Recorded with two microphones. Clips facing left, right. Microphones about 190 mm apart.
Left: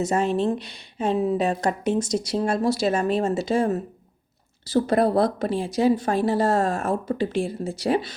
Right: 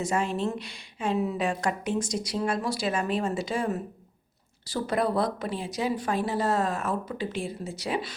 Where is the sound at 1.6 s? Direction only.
20° left (ahead or behind).